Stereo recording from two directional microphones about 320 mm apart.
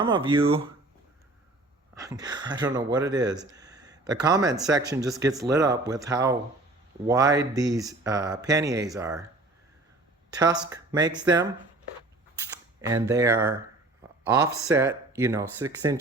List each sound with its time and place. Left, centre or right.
0.0 s speech: centre
2.0 s speech: centre
5.0 s speech: centre
10.3 s speech: centre
12.8 s speech: centre